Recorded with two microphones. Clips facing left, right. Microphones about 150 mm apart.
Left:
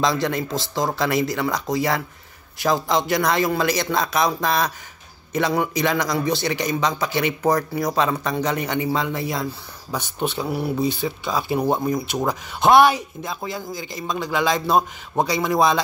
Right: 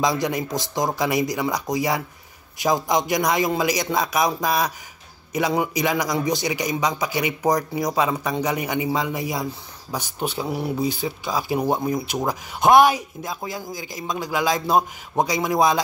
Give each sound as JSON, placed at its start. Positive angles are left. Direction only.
{"t": 0.0, "sound": "a man's voice", "side_deg": -15}
{"t": 10.9, "sound": "speech", "side_deg": 60}
{"t": 11.2, "sound": "a man's voice", "side_deg": -10}